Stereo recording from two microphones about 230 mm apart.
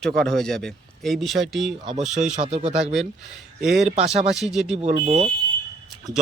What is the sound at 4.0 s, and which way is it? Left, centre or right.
Speech, right.